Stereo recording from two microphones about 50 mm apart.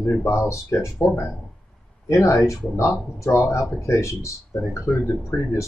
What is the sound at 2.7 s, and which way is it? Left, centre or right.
Speech, left.